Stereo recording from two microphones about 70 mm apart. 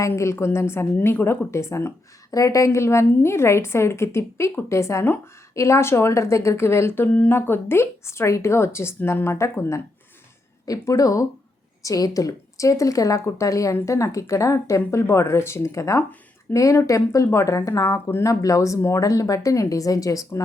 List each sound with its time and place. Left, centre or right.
0.2 s a woman's voice: left
2.3 s a woman's voice: left
5.0 s a woman's voice: left
5.5 s a woman's voice: left
10.7 s speech: left